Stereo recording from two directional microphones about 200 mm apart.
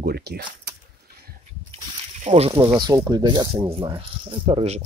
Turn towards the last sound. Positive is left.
turn(degrees=-30)  # may be behind; listen again after turning